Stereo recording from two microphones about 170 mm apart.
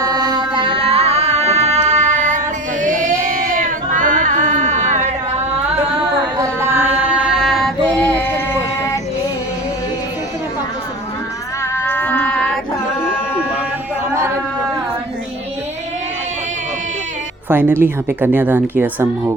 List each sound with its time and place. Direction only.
0.0 s music: 20° right (ahead or behind); by 2.4 s 45° right (ahead or behind)
2.8 s a sound: 50° right (ahead or behind)
6.3 s singing: 15° right (ahead or behind); by 8.3 s 10° left (ahead or behind)
11.7 s music: 10° left (ahead or behind)
17.5 s speech: 10° right (ahead or behind)